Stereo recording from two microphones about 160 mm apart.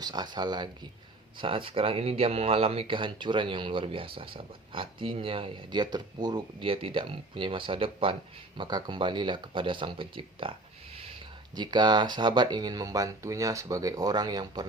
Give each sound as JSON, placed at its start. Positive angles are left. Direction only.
{"t": 0.0, "sound": "speech", "side_deg": -25}
{"t": 11.5, "sound": "speech", "side_deg": -25}